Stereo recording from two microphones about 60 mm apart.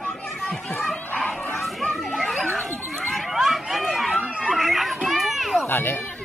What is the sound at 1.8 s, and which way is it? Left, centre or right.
Children playing, centre.